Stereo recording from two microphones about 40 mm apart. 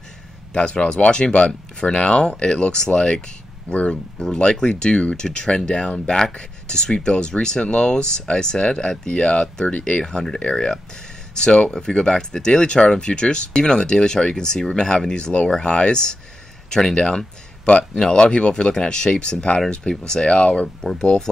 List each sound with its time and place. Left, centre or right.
0.5 s speech: left
3.7 s speech: left
4.4 s speech: left
10.0 s speech: centre